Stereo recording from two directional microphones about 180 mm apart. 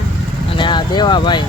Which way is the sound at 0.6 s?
25° left (ahead or behind).